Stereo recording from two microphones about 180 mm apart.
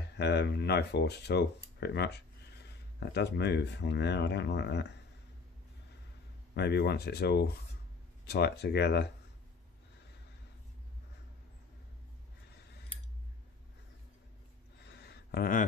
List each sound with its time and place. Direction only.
0.2 s speech: 65° left (ahead or behind)
6.5 s speech: 65° left (ahead or behind)
14.9 s a sound: 65° left (ahead or behind)